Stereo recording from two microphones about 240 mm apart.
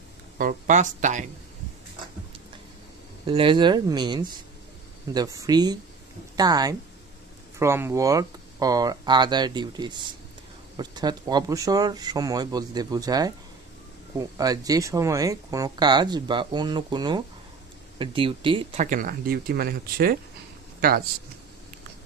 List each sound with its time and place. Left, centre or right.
0.4 s speech: right
3.3 s speech: centre
18.9 s speech: right